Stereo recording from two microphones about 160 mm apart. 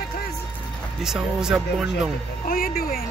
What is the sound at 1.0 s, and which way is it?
Speech, 5° right (ahead or behind).